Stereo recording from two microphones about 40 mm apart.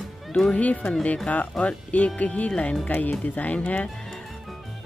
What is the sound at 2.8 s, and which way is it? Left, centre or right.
Speech, left.